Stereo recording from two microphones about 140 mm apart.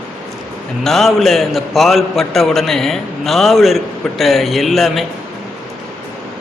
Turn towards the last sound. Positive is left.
turn(degrees=0)  # may be behind; listen again after turning